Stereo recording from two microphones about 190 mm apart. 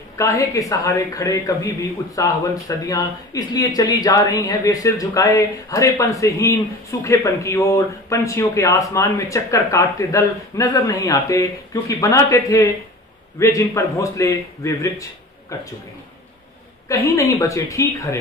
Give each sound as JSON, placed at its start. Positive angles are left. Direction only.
{"t": 0.2, "sound": "speech", "side_deg": 15}
{"t": 17.1, "sound": "speech", "side_deg": 15}